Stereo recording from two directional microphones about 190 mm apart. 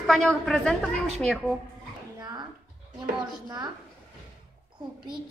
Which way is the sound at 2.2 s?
20° right (ahead or behind).